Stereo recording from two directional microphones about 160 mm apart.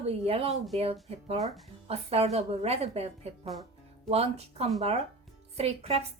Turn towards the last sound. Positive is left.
turn(degrees=-40)  # may be behind; listen again after turning